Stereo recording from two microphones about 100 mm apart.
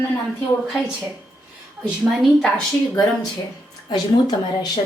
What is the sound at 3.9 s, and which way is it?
Speech, 45° left (ahead or behind).